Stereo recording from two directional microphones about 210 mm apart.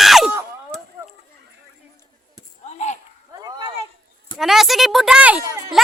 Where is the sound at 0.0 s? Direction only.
Centre (ahead or behind).